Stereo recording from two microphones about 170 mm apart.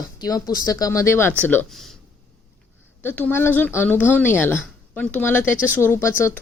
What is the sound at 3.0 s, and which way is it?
A woman's voice, 10° left (ahead or behind).